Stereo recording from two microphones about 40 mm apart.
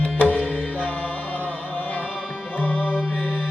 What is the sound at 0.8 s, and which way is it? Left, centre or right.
Chant, left.